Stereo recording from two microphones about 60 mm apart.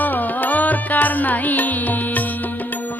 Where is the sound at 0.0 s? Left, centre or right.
Left.